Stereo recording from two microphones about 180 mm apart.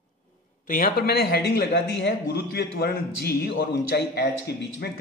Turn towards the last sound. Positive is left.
turn(degrees=60)  # may be behind; listen again after turning